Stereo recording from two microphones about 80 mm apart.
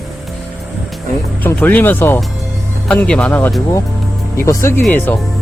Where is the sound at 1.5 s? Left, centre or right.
Left.